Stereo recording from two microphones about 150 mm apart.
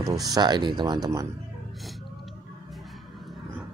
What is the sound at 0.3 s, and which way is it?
Speech, 30° right (ahead or behind).